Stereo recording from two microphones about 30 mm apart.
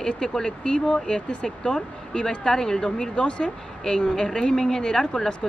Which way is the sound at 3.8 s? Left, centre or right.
Centre.